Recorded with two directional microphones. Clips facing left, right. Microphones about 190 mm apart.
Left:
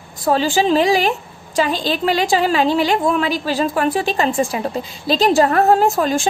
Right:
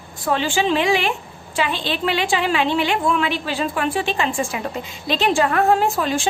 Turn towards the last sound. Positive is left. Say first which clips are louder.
# left 4 dB
turn(degrees=40)  # may be behind; listen again after turning